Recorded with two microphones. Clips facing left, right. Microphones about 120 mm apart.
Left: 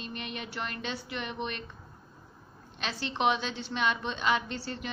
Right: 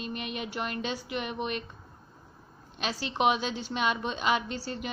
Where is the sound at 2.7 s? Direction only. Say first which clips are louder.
Right 2 dB; 10° right (ahead or behind).